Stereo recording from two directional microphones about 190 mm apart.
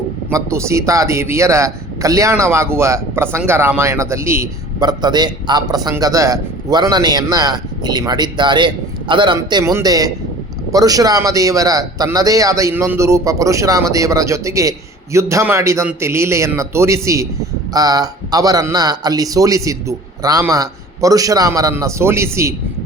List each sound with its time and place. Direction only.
0.3 s a man's voice: 15° right (ahead or behind)